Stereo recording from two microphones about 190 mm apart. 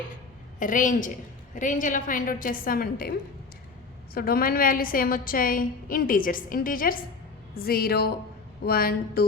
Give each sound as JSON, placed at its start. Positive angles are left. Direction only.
{"t": 0.6, "sound": "a woman's voice", "side_deg": 45}